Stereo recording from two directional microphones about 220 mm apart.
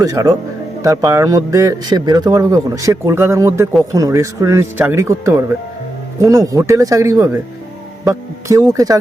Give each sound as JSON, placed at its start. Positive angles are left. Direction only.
{"t": 0.0, "sound": "a man's voice", "side_deg": -15}